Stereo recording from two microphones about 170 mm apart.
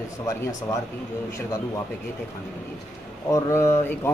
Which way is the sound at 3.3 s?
15° left (ahead or behind).